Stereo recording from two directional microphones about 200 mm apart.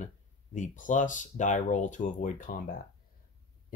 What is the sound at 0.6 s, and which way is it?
Speech, 40° left (ahead or behind).